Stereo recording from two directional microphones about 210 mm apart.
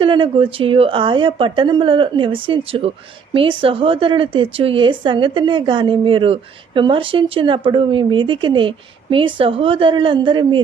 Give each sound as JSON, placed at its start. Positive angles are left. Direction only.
{"t": 0.0, "sound": "a woman's voice", "side_deg": -25}